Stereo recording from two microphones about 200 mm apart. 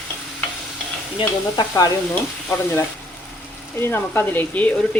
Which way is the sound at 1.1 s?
20° left (ahead or behind).